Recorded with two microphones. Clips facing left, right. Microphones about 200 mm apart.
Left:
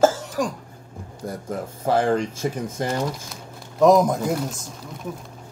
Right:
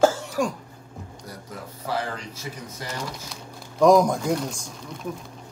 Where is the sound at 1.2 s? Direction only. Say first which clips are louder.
Left 12 dB; 50° left (ahead or behind).